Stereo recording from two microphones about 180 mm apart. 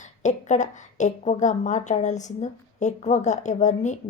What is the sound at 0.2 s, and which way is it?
A woman's voice, 40° left (ahead or behind).